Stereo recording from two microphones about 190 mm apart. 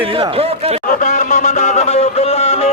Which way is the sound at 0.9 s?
40° left (ahead or behind).